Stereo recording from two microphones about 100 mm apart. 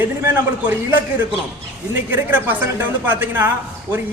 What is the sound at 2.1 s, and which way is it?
Speech, 20° right (ahead or behind).